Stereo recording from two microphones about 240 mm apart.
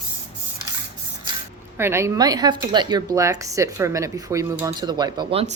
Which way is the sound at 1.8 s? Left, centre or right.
Centre.